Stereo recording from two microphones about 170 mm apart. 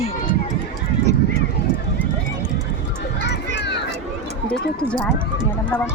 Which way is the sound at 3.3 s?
85° left.